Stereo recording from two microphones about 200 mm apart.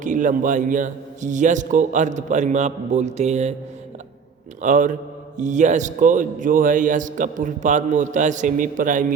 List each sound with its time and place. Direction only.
0.0 s a man's voice: 40° right (ahead or behind)
4.6 s a man's voice: 40° right (ahead or behind)